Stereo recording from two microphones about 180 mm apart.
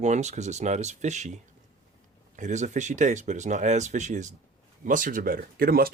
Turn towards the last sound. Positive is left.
turn(degrees=-55)  # may be behind; listen again after turning